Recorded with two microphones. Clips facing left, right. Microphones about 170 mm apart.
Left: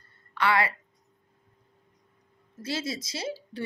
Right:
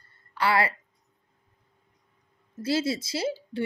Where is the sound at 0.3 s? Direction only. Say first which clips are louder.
Right 1 dB; 30° right (ahead or behind).